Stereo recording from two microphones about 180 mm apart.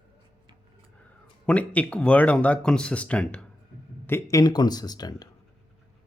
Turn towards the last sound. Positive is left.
turn(degrees=20)  # may be behind; listen again after turning